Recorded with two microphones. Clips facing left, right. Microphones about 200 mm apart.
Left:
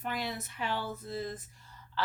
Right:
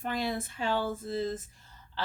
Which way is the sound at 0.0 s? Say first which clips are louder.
Right 4 dB; 25° right (ahead or behind).